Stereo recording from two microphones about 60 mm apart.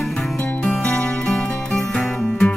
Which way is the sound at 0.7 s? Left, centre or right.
Centre.